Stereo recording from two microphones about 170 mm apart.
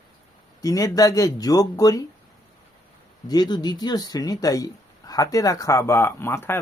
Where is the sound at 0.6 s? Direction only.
20° left (ahead or behind).